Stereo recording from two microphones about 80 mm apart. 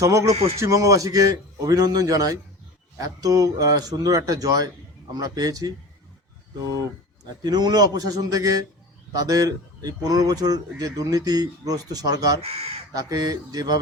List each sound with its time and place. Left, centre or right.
0.0 s speech: right